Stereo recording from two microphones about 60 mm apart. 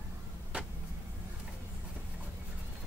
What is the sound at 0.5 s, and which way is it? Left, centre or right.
Vehicle, right.